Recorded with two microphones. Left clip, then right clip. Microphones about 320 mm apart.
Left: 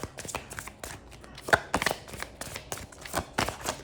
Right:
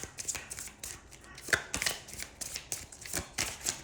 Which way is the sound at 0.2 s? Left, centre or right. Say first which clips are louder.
Left 1 dB; centre.